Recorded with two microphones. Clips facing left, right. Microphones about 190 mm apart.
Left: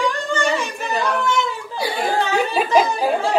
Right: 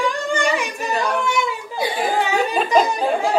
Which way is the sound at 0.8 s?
Centre (ahead or behind).